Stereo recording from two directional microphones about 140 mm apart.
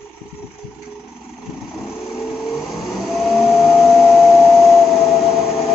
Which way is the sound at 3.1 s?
Centre (ahead or behind).